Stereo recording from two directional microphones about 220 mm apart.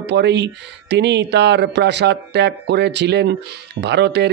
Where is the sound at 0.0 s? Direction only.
50° right (ahead or behind).